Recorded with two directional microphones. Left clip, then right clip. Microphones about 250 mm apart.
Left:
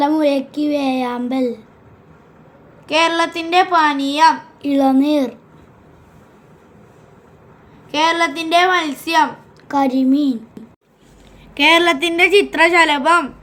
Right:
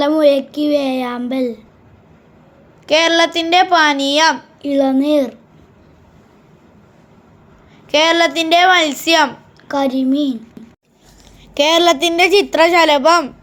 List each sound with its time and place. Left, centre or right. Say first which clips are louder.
0.0 s speech: right 4 dB; centre
2.8 s a woman's voice: right 3 dB; right
4.6 s speech: even; centre
7.9 s a woman's voice: right 3 dB; right
9.6 s a woman's voice: left 1 dB; centre
11.5 s a woman's voice: right 1 dB; right